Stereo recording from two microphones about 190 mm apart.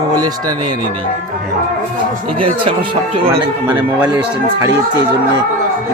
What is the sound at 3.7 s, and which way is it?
Speech, 10° right (ahead or behind).